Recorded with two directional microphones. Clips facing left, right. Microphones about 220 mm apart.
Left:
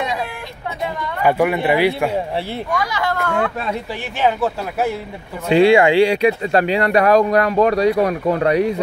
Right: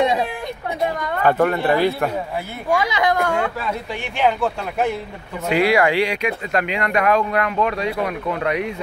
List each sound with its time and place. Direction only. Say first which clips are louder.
1.2 s a man's voice: left 1 dB; 10° left (ahead or behind)
2.8 s a woman's voice: right 2 dB; 20° right (ahead or behind)
4.2 s a man's voice: left 1 dB; 5° left (ahead or behind)
5.5 s speech: left 5 dB; 25° left (ahead or behind)